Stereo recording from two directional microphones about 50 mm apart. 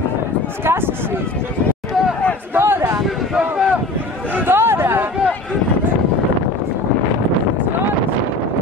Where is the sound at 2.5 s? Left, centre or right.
Right.